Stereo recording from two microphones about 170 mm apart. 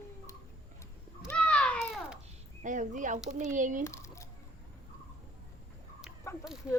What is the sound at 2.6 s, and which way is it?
Speech, 50° right (ahead or behind).